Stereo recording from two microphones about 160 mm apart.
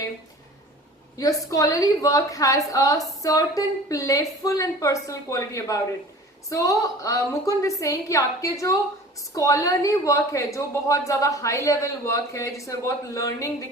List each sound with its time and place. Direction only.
1.1 s a woman's voice: 20° left (ahead or behind)